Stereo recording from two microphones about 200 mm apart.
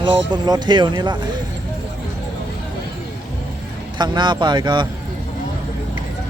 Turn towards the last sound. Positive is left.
turn(degrees=-25)  # may be behind; listen again after turning